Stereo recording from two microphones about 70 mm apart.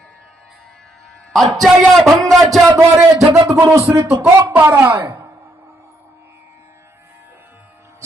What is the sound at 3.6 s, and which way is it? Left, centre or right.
Speech, right.